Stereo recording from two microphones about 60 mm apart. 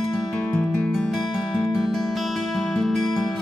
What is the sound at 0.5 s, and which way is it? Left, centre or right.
Music, centre.